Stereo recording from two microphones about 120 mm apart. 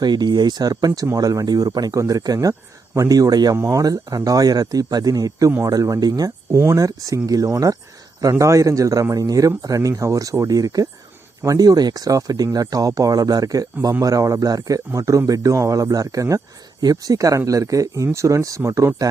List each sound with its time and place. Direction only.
0.0 s speech: 35° right (ahead or behind)
6.5 s speech: 20° right (ahead or behind)